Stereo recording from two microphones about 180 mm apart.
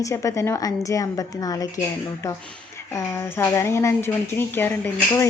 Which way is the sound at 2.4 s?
5° left (ahead or behind).